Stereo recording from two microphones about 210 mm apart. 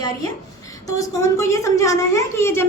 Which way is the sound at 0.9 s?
15° left (ahead or behind).